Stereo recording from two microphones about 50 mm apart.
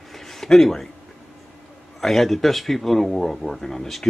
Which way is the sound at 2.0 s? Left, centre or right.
Centre.